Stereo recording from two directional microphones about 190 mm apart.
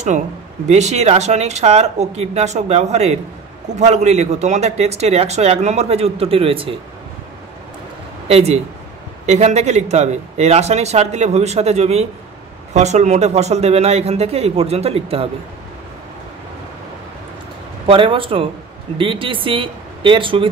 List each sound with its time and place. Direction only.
0.7 s speech: 35° right (ahead or behind)
8.3 s speech: 35° right (ahead or behind)
17.8 s speech: 30° right (ahead or behind)